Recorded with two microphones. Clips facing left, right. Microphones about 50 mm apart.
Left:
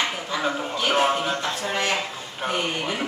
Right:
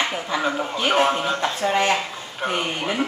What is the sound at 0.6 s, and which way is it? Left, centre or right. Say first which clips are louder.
Speech: right 2 dB; centre.